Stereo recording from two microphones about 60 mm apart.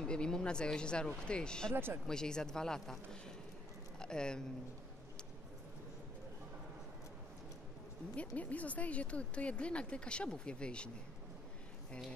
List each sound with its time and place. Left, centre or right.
0.0 s speech: centre
1.7 s speech: right
2.0 s speech: centre
8.2 s speech: left